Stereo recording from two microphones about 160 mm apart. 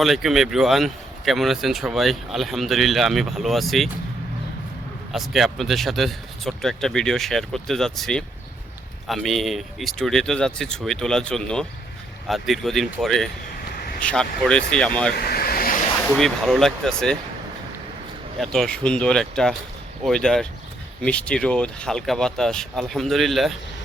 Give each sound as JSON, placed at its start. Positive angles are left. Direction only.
{"t": 0.0, "sound": "speech", "side_deg": 0}
{"t": 5.1, "sound": "speech", "side_deg": 0}
{"t": 15.1, "sound": "vehicle", "side_deg": 75}
{"t": 16.1, "sound": "speech", "side_deg": 0}
{"t": 18.3, "sound": "speech", "side_deg": 5}